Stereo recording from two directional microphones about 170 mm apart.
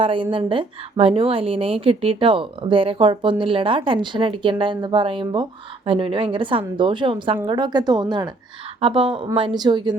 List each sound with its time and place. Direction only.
0.0 s a woman's voice: 30° right (ahead or behind)